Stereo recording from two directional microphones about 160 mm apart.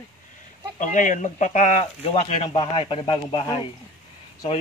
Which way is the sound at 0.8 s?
50° left (ahead or behind).